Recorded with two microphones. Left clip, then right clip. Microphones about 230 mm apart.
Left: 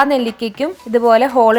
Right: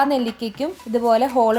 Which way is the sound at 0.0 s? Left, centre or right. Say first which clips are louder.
Left 5 dB; left.